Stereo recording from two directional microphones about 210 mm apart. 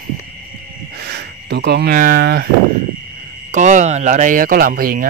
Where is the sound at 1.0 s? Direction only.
50° right (ahead or behind).